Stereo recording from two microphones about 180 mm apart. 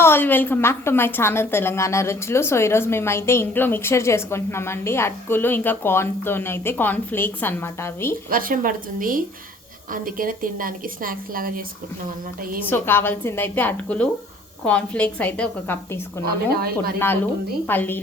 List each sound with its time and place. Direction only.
0.0 s a woman's voice: 10° left (ahead or behind)
8.3 s a woman's voice: 50° right (ahead or behind)
12.6 s a woman's voice: 10° left (ahead or behind)
16.6 s speech: 55° right (ahead or behind)
17.7 s a woman's voice: 10° left (ahead or behind)